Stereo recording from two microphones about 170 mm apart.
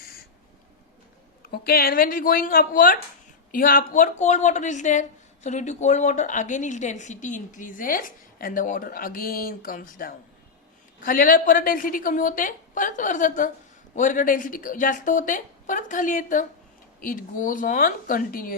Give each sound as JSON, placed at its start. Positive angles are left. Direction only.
{"t": 1.4, "sound": "speech", "side_deg": 65}